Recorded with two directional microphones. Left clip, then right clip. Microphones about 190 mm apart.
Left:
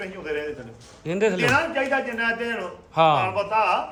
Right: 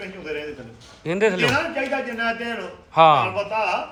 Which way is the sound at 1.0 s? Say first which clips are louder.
Right 2 dB; 20° left (ahead or behind).